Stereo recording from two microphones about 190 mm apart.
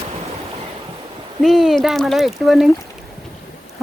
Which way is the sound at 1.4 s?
Centre (ahead or behind).